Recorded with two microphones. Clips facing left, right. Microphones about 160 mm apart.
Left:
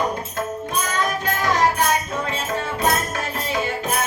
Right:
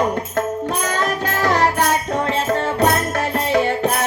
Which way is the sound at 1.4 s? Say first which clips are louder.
Right 3 dB; 70° right (ahead or behind).